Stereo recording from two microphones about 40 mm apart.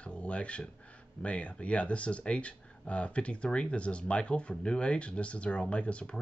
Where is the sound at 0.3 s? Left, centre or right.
Left.